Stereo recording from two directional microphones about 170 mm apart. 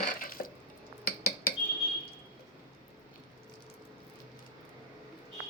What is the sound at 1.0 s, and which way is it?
Cutlery, 60° left (ahead or behind).